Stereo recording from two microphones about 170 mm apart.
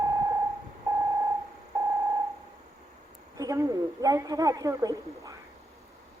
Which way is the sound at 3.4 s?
20° right (ahead or behind).